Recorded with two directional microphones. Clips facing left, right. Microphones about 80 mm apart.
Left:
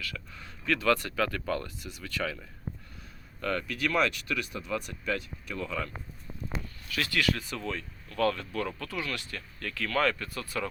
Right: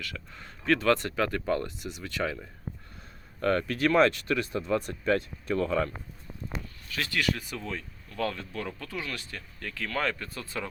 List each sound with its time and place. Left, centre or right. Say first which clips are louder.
0.3 s speech: right 5 dB; right
3.4 s speech: right 5 dB; right
6.9 s speech: left 1 dB; right